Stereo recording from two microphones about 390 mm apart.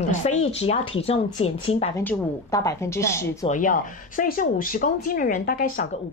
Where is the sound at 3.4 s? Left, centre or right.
Centre.